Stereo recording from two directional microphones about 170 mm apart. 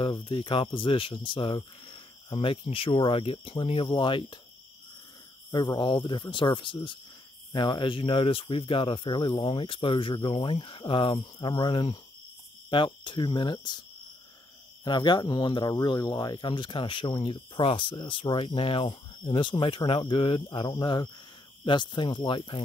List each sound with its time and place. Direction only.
0.0 s speech: 30° left (ahead or behind)
5.5 s speech: 25° left (ahead or behind)
14.9 s speech: 25° left (ahead or behind)